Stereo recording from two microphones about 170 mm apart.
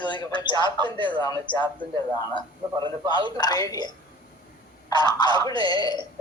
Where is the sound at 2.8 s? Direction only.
25° right (ahead or behind).